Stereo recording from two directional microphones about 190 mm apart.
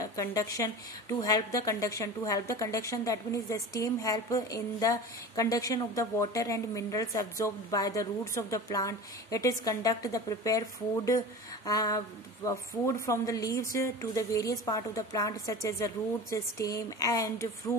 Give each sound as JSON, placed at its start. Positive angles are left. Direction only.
{"t": 0.0, "sound": "a woman's voice", "side_deg": 15}
{"t": 11.6, "sound": "a sound", "side_deg": 20}
{"t": 12.4, "sound": "a woman's voice", "side_deg": 15}